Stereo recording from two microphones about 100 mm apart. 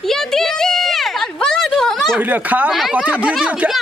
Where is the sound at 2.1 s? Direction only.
15° right (ahead or behind).